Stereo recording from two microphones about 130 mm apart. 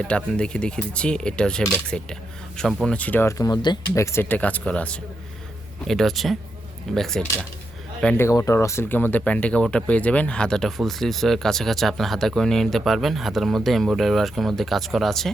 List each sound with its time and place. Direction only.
0.0 s speech: 10° left (ahead or behind); by 3.8 s 35° left (ahead or behind)
3.9 s speech: 20° left (ahead or behind); by 7.3 s 5° left (ahead or behind)
8.1 s speech: 20° left (ahead or behind); by 15.3 s centre (ahead or behind)